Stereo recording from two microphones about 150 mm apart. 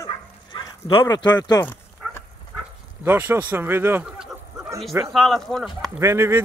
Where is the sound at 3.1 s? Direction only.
10° right (ahead or behind).